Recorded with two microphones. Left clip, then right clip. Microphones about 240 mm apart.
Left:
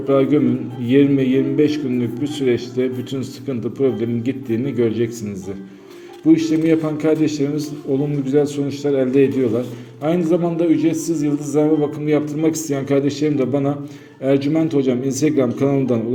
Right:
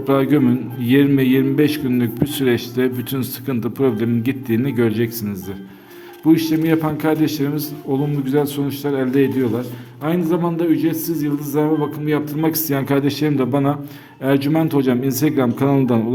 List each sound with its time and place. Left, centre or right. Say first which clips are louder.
0.1 s a man's voice: even; right